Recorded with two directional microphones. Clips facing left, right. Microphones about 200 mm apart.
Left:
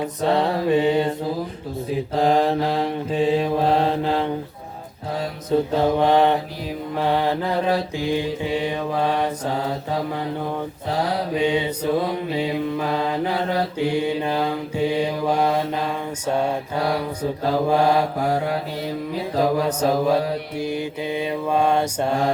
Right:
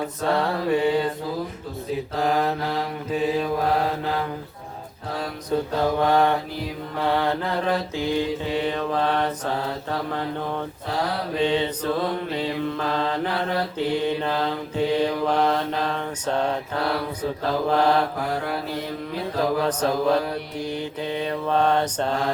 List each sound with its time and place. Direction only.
0.0 s mantra: 20° left (ahead or behind)
2.1 s mantra: 30° left (ahead or behind)
5.5 s mantra: 25° left (ahead or behind)
11.3 s mantra: 10° left (ahead or behind)
17.7 s mantra: 10° left (ahead or behind)
19.2 s mantra: 10° left (ahead or behind)